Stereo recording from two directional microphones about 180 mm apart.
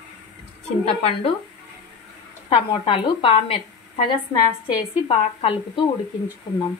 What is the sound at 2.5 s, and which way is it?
A woman's voice, 25° left (ahead or behind).